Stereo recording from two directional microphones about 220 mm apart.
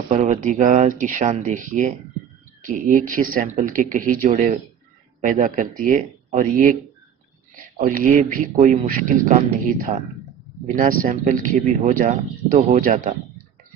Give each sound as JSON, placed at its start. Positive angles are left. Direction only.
{"t": 0.2, "sound": "speech", "side_deg": -35}
{"t": 7.8, "sound": "speech", "side_deg": -35}